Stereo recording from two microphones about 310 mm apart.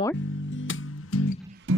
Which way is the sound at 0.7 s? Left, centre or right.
Left.